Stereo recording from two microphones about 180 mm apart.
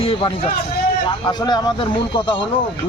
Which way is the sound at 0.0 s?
30° left (ahead or behind).